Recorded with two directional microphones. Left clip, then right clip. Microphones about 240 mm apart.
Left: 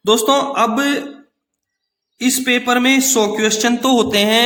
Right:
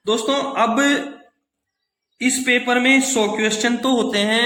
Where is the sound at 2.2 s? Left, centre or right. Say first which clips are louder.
Left 1 dB; left.